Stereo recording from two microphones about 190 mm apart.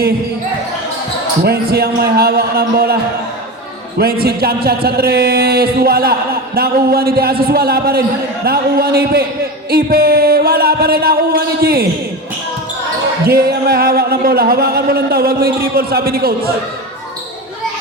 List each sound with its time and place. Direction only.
1.5 s a man's voice: 55° right (ahead or behind)
13.2 s speech: 55° right (ahead or behind)